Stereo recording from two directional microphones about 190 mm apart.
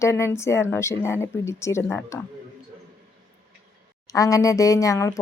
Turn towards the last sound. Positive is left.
turn(degrees=15)  # may be behind; listen again after turning